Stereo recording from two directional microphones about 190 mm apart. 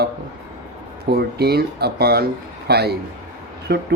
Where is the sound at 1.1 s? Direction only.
55° right (ahead or behind).